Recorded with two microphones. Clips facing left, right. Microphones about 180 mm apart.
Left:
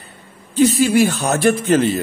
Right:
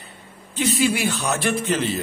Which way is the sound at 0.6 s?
45° left (ahead or behind).